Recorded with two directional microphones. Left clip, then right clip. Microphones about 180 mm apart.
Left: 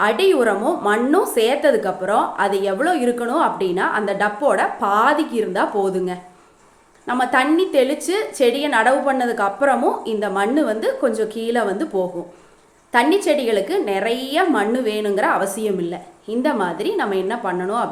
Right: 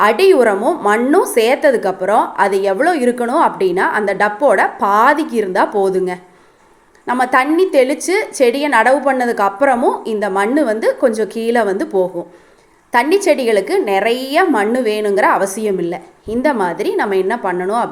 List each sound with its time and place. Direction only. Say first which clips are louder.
0.0 s a woman's voice: right 6 dB; 35° right (ahead or behind)